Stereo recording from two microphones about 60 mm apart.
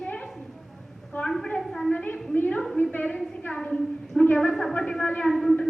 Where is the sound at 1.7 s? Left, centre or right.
Centre.